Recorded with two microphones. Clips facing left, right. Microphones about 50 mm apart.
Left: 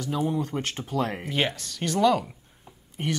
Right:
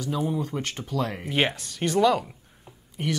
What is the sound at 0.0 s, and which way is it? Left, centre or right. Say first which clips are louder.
Speech: even; centre.